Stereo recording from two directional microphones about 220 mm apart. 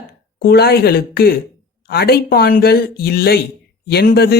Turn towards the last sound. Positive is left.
turn(degrees=45)  # may be behind; listen again after turning